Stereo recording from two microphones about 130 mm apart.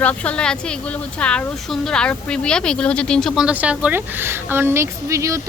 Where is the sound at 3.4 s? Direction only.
10° right (ahead or behind).